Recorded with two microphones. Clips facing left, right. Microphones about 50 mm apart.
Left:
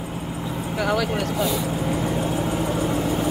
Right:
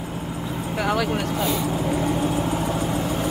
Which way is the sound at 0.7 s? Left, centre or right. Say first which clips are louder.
Even; right.